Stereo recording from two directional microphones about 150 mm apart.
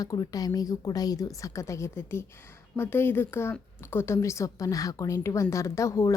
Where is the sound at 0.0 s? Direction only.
25° left (ahead or behind).